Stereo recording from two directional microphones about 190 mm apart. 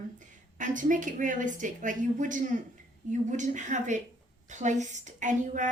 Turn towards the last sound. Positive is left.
turn(degrees=-40)  # may be behind; listen again after turning